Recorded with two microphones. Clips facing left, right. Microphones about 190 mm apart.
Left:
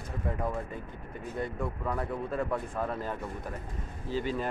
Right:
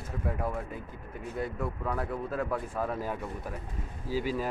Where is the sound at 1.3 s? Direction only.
5° right (ahead or behind).